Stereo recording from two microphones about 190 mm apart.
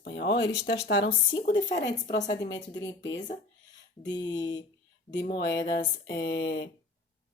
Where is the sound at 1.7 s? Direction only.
65° left (ahead or behind).